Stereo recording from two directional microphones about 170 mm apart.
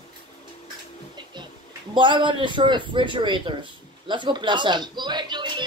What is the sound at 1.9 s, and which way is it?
A man's voice, 30° right (ahead or behind).